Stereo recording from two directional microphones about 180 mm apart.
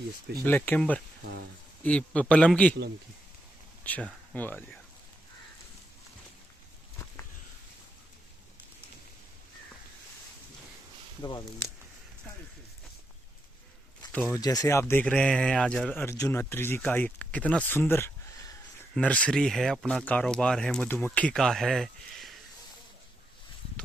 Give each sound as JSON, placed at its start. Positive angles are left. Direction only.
{"t": 0.4, "sound": "speech", "side_deg": 10}
{"t": 3.8, "sound": "speech", "side_deg": 10}
{"t": 11.2, "sound": "speech", "side_deg": 20}
{"t": 14.3, "sound": "speech", "side_deg": 20}